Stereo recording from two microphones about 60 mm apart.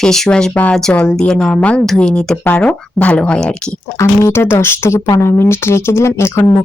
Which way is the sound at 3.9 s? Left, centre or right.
Left.